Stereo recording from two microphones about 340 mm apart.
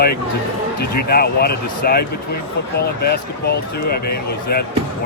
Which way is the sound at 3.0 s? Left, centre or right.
Left.